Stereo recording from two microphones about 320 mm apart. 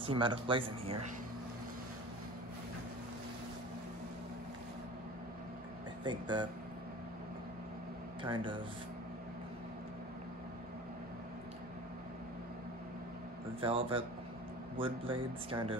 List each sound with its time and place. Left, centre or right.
0.0 s speech: centre
6.0 s speech: centre
8.2 s speech: centre
13.6 s speech: centre